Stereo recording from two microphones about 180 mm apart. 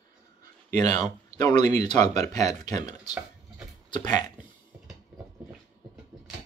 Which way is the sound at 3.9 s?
25° left (ahead or behind).